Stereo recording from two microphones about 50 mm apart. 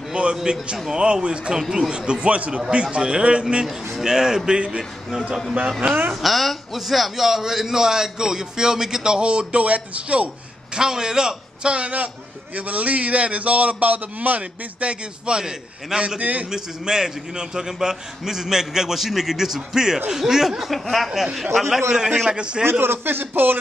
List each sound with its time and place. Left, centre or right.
0.1 s a man's voice: centre
6.2 s a man's voice: centre; by 10.8 s right
10.8 s a man's voice: centre
16.2 s a man's voice: right
16.4 s a man's voice: centre
22.7 s a man's voice: right